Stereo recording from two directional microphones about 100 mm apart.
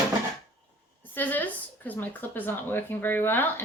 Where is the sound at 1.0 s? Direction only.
15° left (ahead or behind).